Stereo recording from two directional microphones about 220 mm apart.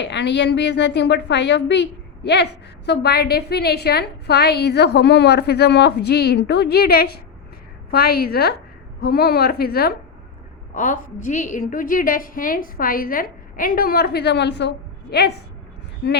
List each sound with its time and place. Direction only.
0.0 s a woman's voice: 50° left (ahead or behind)